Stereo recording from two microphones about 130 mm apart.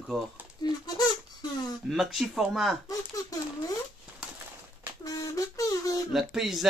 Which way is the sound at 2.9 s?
30° left (ahead or behind).